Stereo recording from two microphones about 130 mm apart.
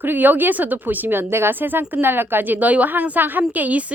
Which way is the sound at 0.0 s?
15° right (ahead or behind).